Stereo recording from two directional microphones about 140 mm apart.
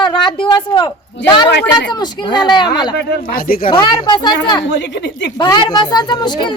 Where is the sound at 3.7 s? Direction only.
35° left (ahead or behind).